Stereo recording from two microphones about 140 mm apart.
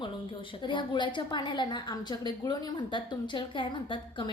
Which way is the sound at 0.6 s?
35° left (ahead or behind).